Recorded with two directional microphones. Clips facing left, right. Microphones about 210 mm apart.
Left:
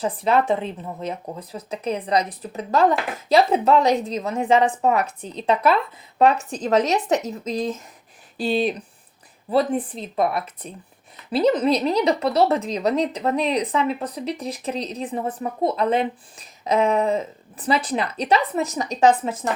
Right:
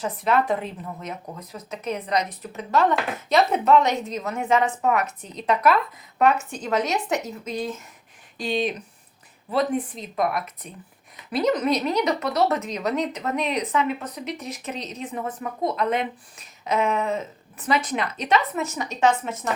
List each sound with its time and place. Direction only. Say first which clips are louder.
0.0 s speech: left 2 dB; 30° left (ahead or behind)